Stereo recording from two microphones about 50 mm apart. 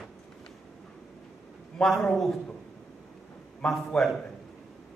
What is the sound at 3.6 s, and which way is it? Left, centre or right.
Speech, centre.